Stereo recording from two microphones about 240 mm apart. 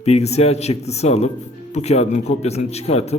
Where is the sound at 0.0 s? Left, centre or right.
Left.